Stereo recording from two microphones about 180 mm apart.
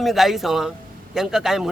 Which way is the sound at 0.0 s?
Centre (ahead or behind).